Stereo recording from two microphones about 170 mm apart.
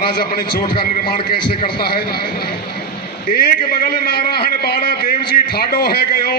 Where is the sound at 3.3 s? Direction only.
65° left (ahead or behind).